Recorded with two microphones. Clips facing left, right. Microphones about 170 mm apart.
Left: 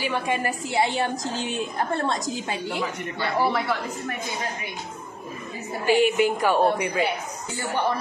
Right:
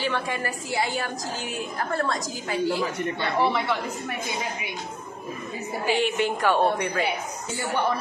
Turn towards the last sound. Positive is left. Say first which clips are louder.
# left 1 dB
turn(degrees=0)  # may be behind; listen again after turning